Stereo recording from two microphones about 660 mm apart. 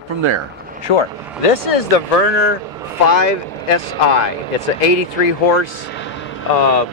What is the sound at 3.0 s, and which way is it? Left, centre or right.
Speech, left.